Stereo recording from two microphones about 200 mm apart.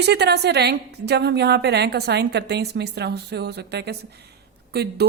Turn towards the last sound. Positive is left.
turn(degrees=-55)  # may be behind; listen again after turning